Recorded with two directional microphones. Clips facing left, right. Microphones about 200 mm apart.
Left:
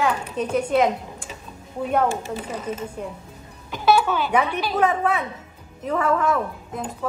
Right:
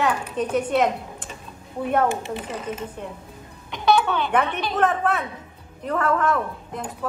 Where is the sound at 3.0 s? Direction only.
5° left (ahead or behind).